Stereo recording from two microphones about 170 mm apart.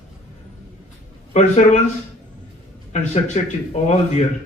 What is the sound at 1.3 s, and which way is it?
Speech, 45° left (ahead or behind).